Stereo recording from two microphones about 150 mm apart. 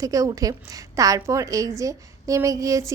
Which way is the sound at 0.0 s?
20° right (ahead or behind).